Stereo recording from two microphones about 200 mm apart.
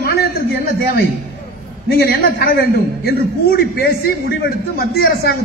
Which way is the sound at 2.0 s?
50° left (ahead or behind).